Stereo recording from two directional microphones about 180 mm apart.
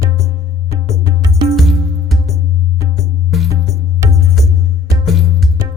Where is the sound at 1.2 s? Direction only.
20° right (ahead or behind).